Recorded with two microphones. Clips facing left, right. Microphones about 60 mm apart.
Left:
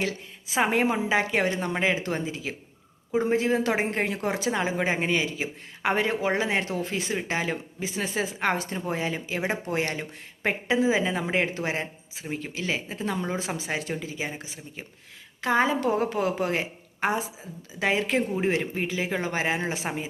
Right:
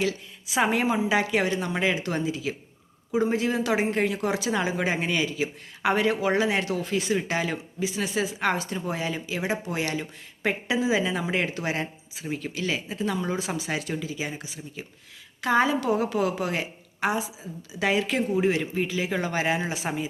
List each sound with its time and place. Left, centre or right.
0.0 s a woman's voice: left